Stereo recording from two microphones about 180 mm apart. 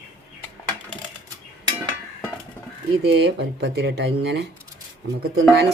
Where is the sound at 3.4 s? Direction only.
70° right (ahead or behind).